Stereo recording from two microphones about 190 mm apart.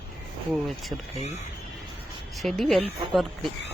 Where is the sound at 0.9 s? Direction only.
10° right (ahead or behind).